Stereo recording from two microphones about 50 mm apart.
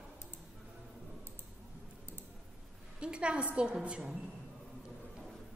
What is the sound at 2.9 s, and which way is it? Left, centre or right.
A woman's voice, right.